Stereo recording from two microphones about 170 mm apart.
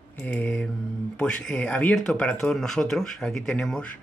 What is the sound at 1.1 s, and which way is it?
Speech, 5° left (ahead or behind).